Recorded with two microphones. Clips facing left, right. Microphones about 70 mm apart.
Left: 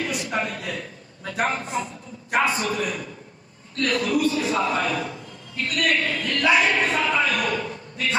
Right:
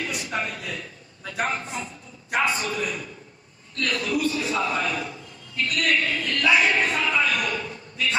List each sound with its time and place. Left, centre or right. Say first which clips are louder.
0.0 s a man's voice: left 3 dB; left